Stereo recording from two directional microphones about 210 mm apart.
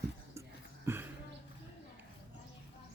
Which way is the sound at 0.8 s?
10° right (ahead or behind).